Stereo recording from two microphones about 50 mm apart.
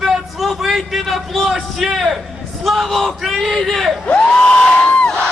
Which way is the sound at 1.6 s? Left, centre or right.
Centre.